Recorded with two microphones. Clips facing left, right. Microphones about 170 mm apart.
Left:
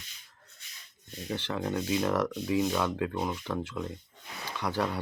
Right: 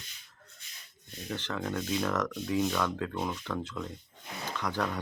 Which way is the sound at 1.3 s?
10° left (ahead or behind).